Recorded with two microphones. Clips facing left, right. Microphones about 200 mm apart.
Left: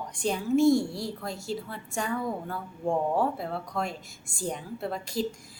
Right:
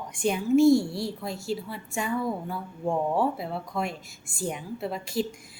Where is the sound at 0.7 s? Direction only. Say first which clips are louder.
Right 2 dB; 40° left (ahead or behind).